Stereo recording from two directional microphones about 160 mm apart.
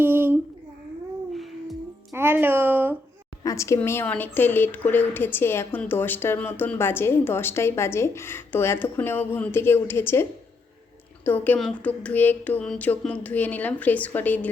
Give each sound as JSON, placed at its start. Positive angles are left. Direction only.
{"t": 0.0, "sound": "a sound", "side_deg": -15}
{"t": 1.3, "sound": "music", "side_deg": 0}
{"t": 2.1, "sound": "speech", "side_deg": -15}
{"t": 3.4, "sound": "a woman's voice", "side_deg": 20}
{"t": 11.3, "sound": "a woman's voice", "side_deg": 10}